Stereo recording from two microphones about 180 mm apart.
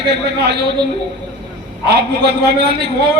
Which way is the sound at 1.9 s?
65° right (ahead or behind).